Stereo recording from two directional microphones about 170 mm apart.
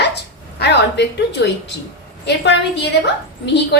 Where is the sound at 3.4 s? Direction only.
90° left.